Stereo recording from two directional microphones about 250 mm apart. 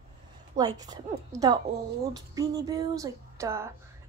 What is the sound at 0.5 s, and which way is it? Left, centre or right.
Speech, centre.